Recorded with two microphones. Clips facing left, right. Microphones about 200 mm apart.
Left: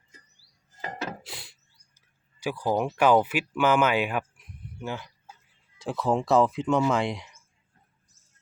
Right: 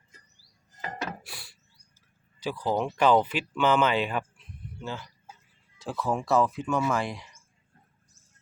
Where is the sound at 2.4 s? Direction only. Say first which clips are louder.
Left 2 dB; 10° left (ahead or behind).